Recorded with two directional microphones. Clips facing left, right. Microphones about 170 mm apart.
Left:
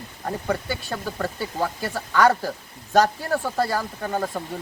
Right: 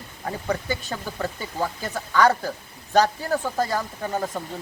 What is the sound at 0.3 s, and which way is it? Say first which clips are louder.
Speech: even; centre (ahead or behind).